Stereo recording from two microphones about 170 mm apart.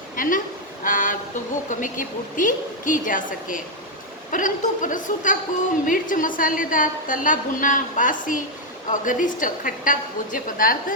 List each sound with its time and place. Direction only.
0.2 s a man's voice: 55° left (ahead or behind)